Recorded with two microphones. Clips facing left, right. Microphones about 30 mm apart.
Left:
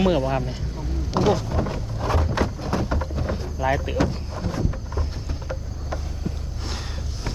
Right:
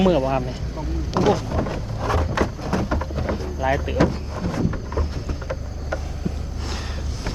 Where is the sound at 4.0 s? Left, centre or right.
Centre.